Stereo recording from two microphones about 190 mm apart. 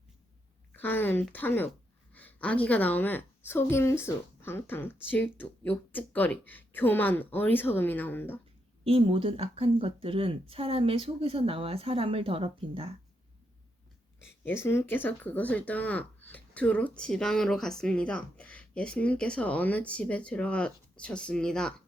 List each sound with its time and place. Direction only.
0.7 s speech: 10° left (ahead or behind)
8.8 s speech: 30° right (ahead or behind)
14.4 s speech: 15° left (ahead or behind)